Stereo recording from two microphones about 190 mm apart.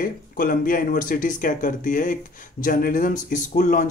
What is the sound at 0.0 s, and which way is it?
Speech, 45° left (ahead or behind).